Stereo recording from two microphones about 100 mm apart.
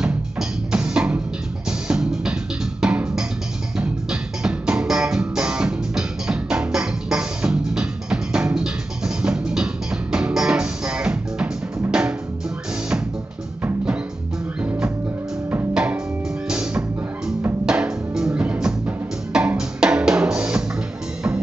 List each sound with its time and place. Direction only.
0.0 s music: 5° right (ahead or behind)
14.6 s music: 15° right (ahead or behind)
19.3 s drum: 5° right (ahead or behind)